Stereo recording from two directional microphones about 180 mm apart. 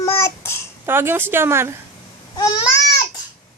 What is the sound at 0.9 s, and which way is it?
Speech, 10° right (ahead or behind).